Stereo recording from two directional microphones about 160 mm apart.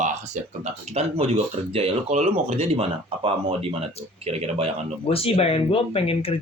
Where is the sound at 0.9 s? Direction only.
40° right (ahead or behind).